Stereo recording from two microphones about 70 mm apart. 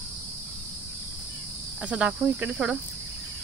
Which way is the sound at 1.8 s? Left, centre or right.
Centre.